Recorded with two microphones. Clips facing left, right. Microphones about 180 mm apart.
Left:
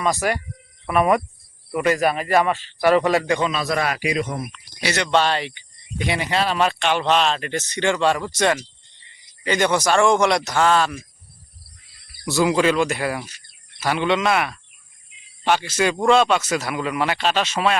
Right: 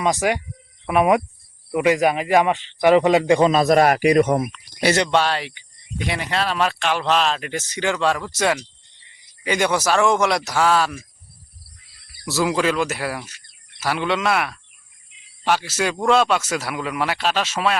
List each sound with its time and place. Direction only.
0.0 s speech: 15° right (ahead or behind)
3.3 s a man's voice: 40° right (ahead or behind)
5.1 s speech: 5° right (ahead or behind)
12.2 s speech: centre (ahead or behind)